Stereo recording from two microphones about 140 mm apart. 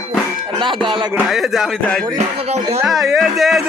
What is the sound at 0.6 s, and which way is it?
Music, 35° right (ahead or behind).